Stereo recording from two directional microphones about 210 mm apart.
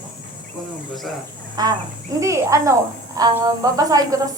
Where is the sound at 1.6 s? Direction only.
20° right (ahead or behind).